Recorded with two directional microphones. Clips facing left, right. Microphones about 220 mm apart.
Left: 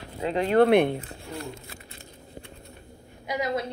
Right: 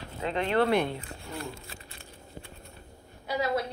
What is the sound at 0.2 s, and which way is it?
Speech, 35° left (ahead or behind).